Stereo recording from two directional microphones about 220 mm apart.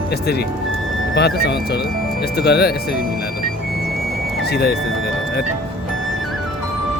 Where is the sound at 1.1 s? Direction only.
50° left (ahead or behind).